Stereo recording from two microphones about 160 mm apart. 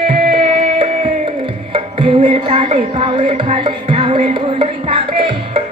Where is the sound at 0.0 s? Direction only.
35° right (ahead or behind).